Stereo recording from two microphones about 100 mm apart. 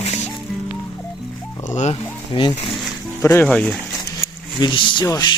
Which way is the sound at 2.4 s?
55° left (ahead or behind).